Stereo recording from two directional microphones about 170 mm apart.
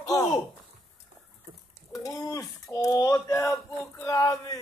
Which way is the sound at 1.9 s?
20° left (ahead or behind).